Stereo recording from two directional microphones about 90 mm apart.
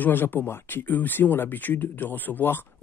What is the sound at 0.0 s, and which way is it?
Speech, 20° left (ahead or behind).